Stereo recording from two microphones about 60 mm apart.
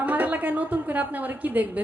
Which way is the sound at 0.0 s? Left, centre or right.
Right.